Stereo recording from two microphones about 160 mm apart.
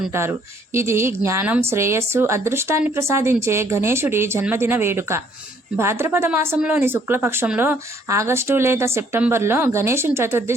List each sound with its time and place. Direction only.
0.1 s a woman's voice: 15° right (ahead or behind)